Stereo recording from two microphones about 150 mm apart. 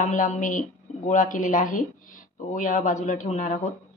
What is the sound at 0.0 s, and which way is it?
Speech, 60° left (ahead or behind).